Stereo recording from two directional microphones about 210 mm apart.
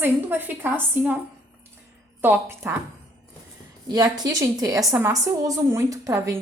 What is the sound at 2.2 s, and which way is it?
Speech, 10° right (ahead or behind).